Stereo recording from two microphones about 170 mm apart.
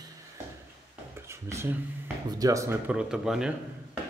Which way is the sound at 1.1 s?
15° right (ahead or behind).